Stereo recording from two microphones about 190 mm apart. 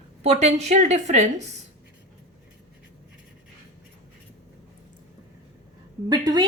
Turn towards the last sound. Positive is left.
turn(degrees=-20)  # may be behind; listen again after turning